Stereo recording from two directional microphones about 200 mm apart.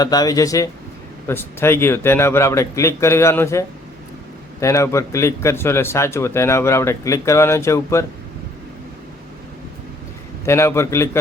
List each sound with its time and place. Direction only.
0.0 s speech: 20° left (ahead or behind)
10.4 s speech: 15° left (ahead or behind)